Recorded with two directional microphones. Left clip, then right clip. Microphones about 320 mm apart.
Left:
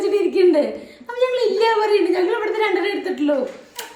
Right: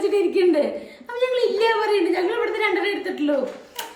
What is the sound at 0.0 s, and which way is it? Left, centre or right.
A woman's voice, centre.